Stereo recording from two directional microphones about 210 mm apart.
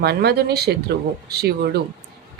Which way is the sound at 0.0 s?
50° right (ahead or behind).